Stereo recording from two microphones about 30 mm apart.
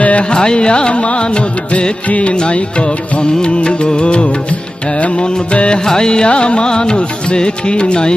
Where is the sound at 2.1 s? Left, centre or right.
Left.